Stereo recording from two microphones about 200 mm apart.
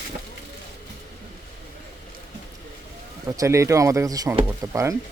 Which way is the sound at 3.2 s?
15° right (ahead or behind).